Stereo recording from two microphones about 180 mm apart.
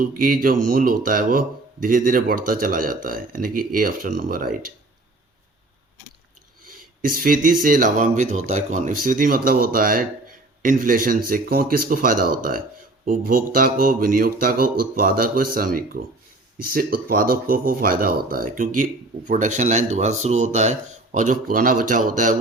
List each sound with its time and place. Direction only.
0.0 s speech: 50° right (ahead or behind)
6.7 s speech: 50° right (ahead or behind)